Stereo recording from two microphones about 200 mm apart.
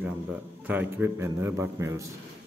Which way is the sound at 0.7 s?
10° right (ahead or behind).